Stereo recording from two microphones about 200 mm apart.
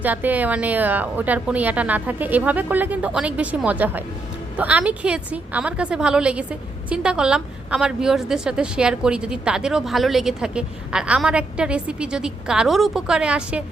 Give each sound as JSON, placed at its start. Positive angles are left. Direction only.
{"t": 0.0, "sound": "a woman's voice", "side_deg": -10}